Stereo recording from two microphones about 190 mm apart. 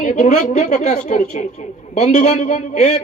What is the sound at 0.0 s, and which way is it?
A woman's voice, 40° left (ahead or behind).